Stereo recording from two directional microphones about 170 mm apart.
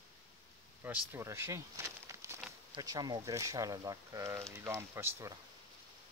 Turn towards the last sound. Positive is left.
turn(degrees=-15)  # may be behind; listen again after turning